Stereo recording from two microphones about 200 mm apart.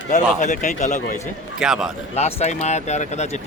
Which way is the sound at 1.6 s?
5° right (ahead or behind).